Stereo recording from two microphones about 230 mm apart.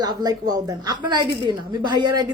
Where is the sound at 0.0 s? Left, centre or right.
Centre.